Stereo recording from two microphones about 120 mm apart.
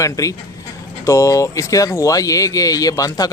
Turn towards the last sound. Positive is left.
turn(degrees=30)  # may be behind; listen again after turning